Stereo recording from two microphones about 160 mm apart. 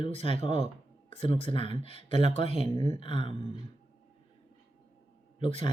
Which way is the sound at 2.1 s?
45° right (ahead or behind).